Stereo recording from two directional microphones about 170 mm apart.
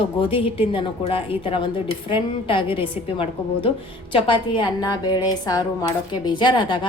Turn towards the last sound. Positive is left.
turn(degrees=25)  # may be behind; listen again after turning